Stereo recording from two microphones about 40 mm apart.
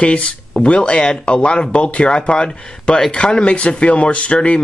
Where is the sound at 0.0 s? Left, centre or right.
Left.